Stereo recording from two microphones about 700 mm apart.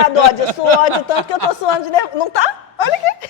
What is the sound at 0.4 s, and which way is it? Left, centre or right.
Speech, right.